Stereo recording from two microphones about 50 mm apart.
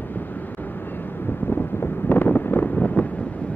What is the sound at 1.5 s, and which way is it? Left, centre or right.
Wind noise, left.